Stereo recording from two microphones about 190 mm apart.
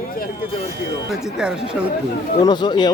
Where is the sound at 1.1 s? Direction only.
5° right (ahead or behind).